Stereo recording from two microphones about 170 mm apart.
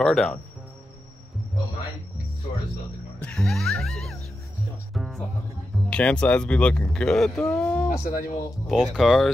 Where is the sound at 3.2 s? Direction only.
5° left (ahead or behind).